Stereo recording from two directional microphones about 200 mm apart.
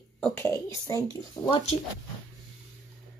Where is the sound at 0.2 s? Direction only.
10° left (ahead or behind).